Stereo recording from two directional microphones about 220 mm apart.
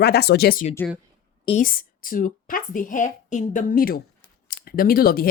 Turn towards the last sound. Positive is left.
turn(degrees=40)  # may be behind; listen again after turning